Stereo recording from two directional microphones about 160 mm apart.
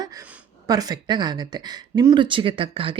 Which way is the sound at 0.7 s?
25° right (ahead or behind).